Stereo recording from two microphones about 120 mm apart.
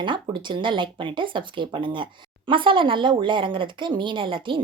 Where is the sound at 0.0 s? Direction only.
40° right (ahead or behind).